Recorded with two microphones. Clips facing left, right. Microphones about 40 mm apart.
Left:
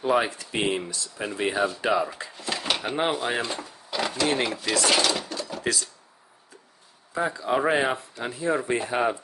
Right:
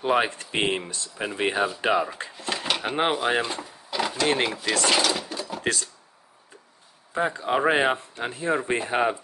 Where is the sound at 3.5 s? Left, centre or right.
Centre.